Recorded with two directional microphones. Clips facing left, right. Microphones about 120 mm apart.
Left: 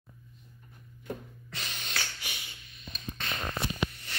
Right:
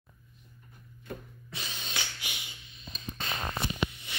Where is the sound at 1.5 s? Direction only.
10° right (ahead or behind).